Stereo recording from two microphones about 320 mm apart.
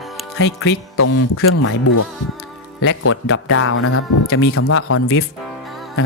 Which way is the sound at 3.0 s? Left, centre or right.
Left.